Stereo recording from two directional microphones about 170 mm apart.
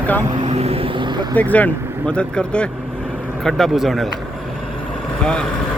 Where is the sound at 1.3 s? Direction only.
10° left (ahead or behind).